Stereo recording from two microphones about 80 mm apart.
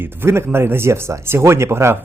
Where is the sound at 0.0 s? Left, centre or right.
Right.